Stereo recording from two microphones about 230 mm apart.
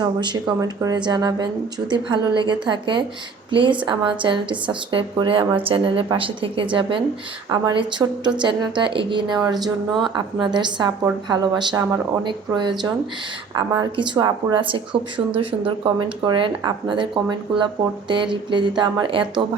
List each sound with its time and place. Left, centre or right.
0.0 s a woman's voice: centre